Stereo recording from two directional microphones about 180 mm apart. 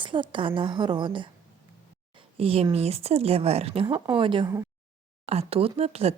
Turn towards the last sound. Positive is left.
turn(degrees=-35)  # may be behind; listen again after turning